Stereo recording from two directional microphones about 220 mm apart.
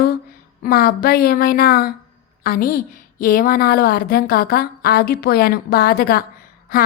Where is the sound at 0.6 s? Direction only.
40° left (ahead or behind).